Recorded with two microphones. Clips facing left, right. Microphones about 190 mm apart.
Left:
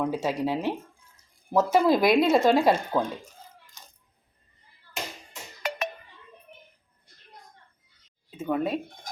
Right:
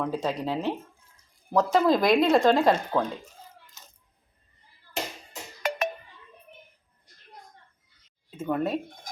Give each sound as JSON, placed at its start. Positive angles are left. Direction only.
{"t": 0.0, "sound": "speech", "side_deg": 10}
{"t": 5.6, "sound": "a sound", "side_deg": -50}
{"t": 8.4, "sound": "speech", "side_deg": 0}